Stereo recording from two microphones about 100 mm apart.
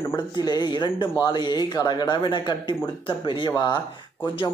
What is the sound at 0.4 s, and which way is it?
Speech, 45° left (ahead or behind).